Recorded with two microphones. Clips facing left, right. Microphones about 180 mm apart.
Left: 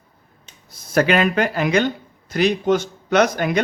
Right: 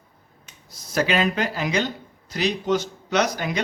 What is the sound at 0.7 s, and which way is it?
Speech, 55° left (ahead or behind).